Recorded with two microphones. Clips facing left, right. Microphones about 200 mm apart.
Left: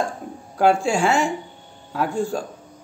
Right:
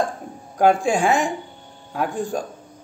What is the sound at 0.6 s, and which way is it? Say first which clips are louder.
Speech: right 1 dB; 15° right (ahead or behind).